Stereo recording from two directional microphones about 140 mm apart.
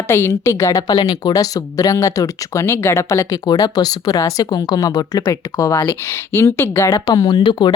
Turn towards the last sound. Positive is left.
turn(degrees=35)  # may be behind; listen again after turning